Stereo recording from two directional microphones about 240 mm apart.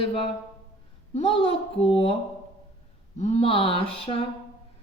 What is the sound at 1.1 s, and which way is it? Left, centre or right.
A woman's voice, left.